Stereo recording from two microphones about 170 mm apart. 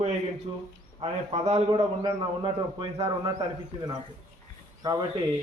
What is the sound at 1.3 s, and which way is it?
Speech, 35° right (ahead or behind).